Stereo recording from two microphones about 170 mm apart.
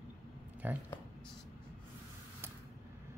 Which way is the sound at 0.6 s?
10° right (ahead or behind).